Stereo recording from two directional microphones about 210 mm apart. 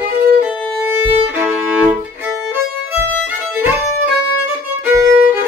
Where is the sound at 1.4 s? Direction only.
5° right (ahead or behind).